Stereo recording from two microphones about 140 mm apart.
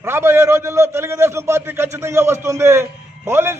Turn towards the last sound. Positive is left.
turn(degrees=-20)  # may be behind; listen again after turning